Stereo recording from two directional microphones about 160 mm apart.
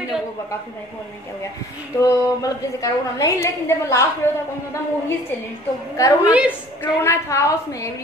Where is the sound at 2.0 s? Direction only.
20° left (ahead or behind).